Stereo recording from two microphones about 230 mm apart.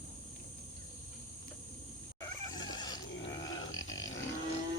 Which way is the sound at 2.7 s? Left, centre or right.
Centre.